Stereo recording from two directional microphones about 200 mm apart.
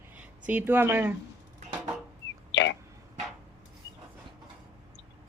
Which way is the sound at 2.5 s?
60° left (ahead or behind).